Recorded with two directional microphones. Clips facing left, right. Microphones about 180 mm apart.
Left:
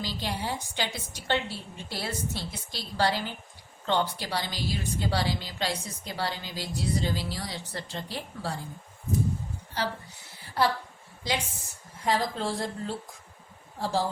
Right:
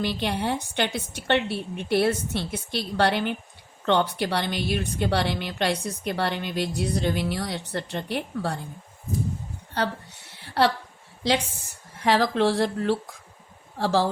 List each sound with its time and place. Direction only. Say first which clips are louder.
0.0 s a woman's voice: right 7 dB; 65° right (ahead or behind)
9.7 s a sound: right 5 dB; 65° right (ahead or behind)
11.2 s a woman's voice: right 7 dB; 75° right (ahead or behind)